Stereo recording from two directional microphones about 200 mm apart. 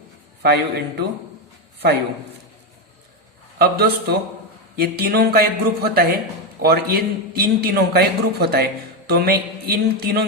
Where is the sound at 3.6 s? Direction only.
50° right (ahead or behind).